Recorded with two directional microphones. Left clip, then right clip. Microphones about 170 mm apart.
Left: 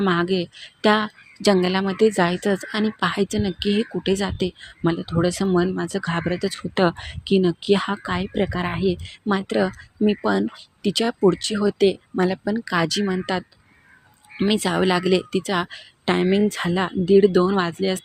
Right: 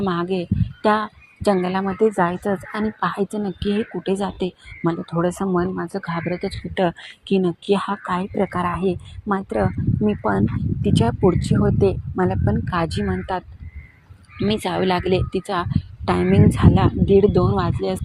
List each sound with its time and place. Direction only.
0.0 s a woman's voice: 25° left (ahead or behind)
5.4 s a woman's voice: 35° left (ahead or behind); by 9.0 s 15° left (ahead or behind)
9.2 s a woman's voice: 25° left (ahead or behind)